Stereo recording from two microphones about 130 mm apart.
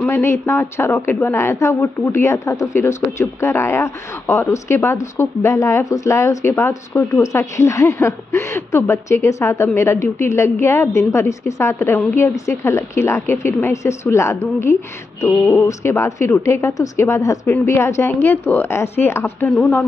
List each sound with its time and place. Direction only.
0.0 s a woman's voice: 20° left (ahead or behind)
19.5 s speech: 10° left (ahead or behind)